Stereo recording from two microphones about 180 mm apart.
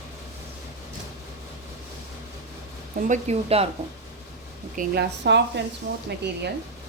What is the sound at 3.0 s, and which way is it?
Speech, 40° right (ahead or behind).